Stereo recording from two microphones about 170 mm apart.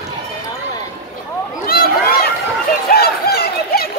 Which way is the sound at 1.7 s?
60° left (ahead or behind).